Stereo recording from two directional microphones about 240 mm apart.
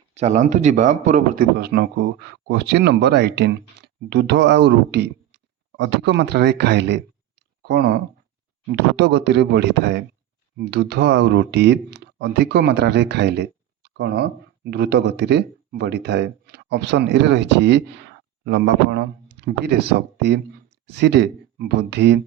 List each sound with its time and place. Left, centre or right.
0.1 s speech: right
7.6 s a sound: right
9.0 s speech: right